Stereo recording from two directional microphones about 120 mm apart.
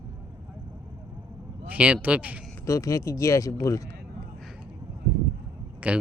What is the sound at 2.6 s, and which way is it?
Speech, 25° left (ahead or behind).